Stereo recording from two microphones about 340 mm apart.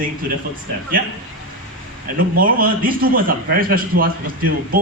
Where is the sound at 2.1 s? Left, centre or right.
Right.